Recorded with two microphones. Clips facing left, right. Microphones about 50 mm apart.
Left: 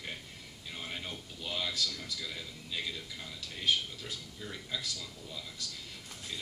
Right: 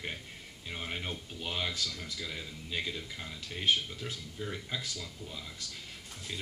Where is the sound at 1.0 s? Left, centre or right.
Right.